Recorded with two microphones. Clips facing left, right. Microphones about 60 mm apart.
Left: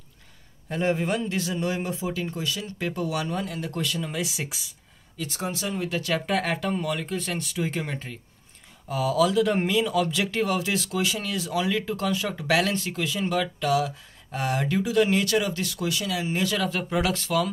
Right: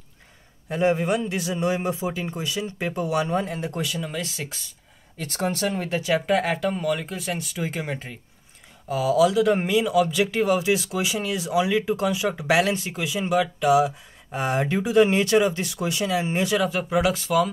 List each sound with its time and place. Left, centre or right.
0.7 s a man's voice: centre
3.8 s speech: centre
4.2 s speech: centre
5.1 s speech: right
6.0 s speech: centre; by 16.4 s right
16.4 s speech: centre